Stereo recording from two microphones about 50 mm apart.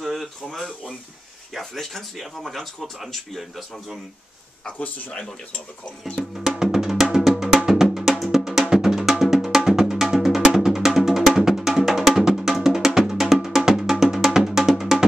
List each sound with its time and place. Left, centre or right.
0.0 s a sound: centre
1.6 s speech: centre
4.7 s speech: left
6.2 s music: centre